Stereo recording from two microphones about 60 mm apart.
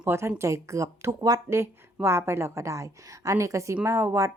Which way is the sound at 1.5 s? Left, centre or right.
Right.